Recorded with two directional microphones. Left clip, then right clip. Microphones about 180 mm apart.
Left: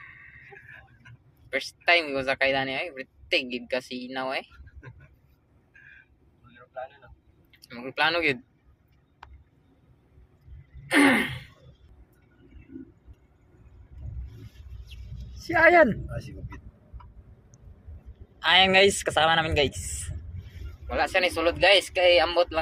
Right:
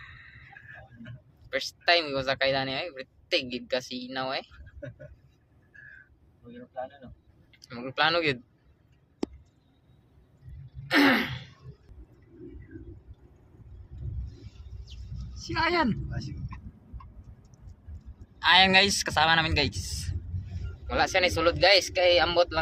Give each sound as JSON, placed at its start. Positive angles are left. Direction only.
{"t": 1.5, "sound": "speech", "side_deg": -10}
{"t": 7.5, "sound": "speech", "side_deg": -15}
{"t": 10.9, "sound": "throat clearing", "side_deg": 0}
{"t": 15.4, "sound": "speech", "side_deg": 25}
{"t": 18.3, "sound": "speech", "side_deg": -5}